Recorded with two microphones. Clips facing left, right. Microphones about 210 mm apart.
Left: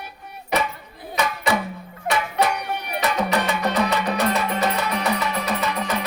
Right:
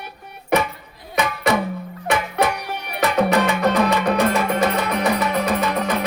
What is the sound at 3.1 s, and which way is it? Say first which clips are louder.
Music: right 7 dB; 55° right (ahead or behind).